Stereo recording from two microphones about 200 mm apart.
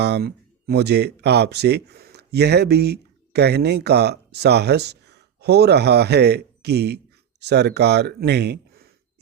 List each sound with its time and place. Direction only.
0.0 s speech: 55° right (ahead or behind)